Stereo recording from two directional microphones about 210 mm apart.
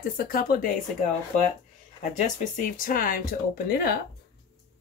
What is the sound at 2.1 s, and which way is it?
Speech, 40° left (ahead or behind).